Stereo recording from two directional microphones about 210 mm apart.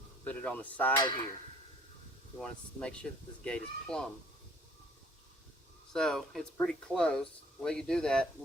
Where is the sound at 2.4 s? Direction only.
5° left (ahead or behind).